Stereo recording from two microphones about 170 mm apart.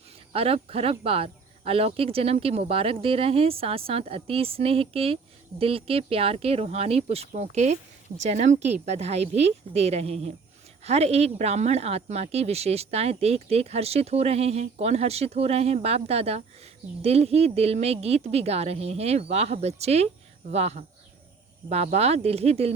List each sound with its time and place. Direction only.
0.3 s speech: 35° right (ahead or behind)